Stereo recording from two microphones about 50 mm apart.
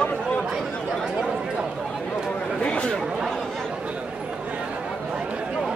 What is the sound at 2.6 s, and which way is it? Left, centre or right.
Chatter, left.